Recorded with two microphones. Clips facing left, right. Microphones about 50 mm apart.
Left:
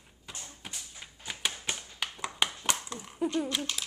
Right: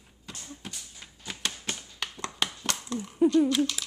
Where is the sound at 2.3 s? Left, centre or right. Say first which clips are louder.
Left 2 dB; centre.